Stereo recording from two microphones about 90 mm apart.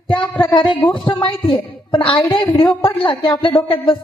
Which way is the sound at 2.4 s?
55° left (ahead or behind).